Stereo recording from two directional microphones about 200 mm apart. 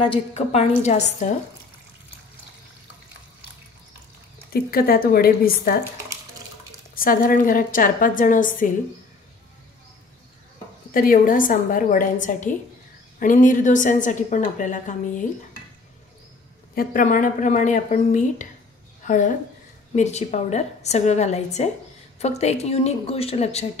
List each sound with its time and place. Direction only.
0.0 s a woman's voice: 30° left (ahead or behind)
4.5 s a woman's voice: 50° left (ahead or behind)
7.0 s a woman's voice: 45° left (ahead or behind)
10.9 s a woman's voice: 45° left (ahead or behind)
16.7 s a woman's voice: 40° left (ahead or behind)